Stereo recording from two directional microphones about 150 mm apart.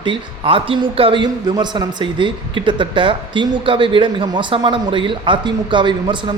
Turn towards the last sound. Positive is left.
turn(degrees=-30)  # may be behind; listen again after turning